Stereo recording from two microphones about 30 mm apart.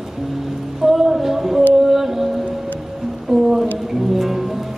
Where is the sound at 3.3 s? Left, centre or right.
Centre.